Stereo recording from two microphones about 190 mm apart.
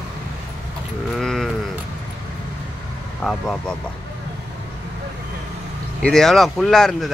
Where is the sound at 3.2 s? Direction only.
5° left (ahead or behind).